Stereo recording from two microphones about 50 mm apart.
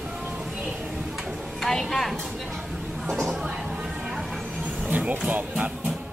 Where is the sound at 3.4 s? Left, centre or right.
Centre.